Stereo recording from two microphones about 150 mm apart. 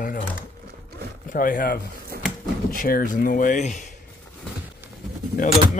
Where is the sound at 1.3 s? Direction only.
65° left (ahead or behind).